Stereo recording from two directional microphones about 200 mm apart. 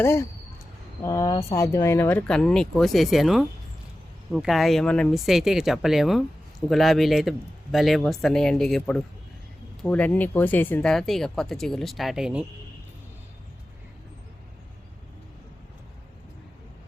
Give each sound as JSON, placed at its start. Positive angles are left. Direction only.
{"t": 0.0, "sound": "speech", "side_deg": 15}